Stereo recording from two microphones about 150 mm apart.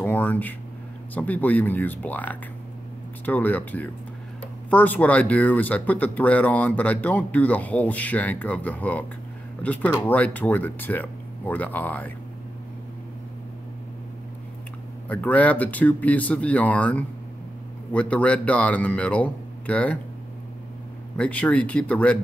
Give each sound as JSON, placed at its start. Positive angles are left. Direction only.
{"t": 0.0, "sound": "a sound", "side_deg": 10}
{"t": 1.1, "sound": "speech", "side_deg": 10}
{"t": 15.0, "sound": "speech", "side_deg": 10}
{"t": 21.2, "sound": "speech", "side_deg": 10}